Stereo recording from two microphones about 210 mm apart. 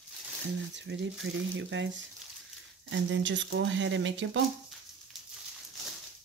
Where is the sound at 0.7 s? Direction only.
60° right (ahead or behind).